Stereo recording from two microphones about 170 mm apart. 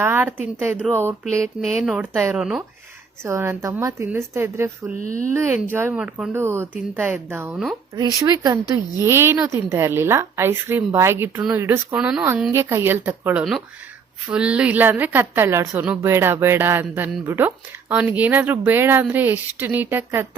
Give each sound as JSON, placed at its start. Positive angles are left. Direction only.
{"t": 0.0, "sound": "a woman's voice", "side_deg": -15}
{"t": 2.1, "sound": "a woman's voice", "side_deg": -15}
{"t": 2.4, "sound": "speech", "side_deg": -5}
{"t": 3.2, "sound": "a woman's voice", "side_deg": -15}
{"t": 4.9, "sound": "speech", "side_deg": -55}
{"t": 5.3, "sound": "a woman's voice", "side_deg": -15}